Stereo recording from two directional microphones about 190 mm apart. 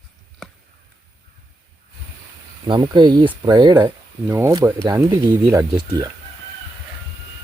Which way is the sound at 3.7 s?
10° right (ahead or behind).